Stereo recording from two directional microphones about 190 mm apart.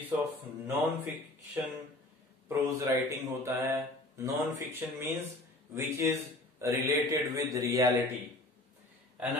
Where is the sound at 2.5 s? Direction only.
15° right (ahead or behind).